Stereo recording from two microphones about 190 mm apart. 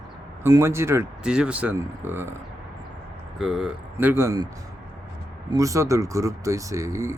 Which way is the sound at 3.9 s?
10° right (ahead or behind).